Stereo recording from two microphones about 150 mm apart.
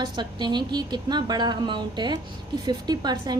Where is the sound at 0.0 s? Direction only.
30° right (ahead or behind).